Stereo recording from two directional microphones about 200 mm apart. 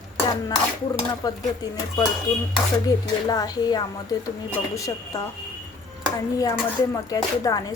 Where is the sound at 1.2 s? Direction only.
20° left (ahead or behind).